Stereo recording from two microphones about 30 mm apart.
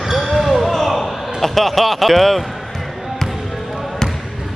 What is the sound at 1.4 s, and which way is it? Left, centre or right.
Speech, centre.